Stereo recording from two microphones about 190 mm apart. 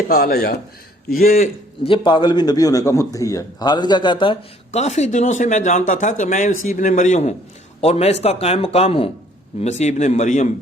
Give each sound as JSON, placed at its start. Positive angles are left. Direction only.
{"t": 0.1, "sound": "a man's voice", "side_deg": 55}
{"t": 1.8, "sound": "a man's voice", "side_deg": 25}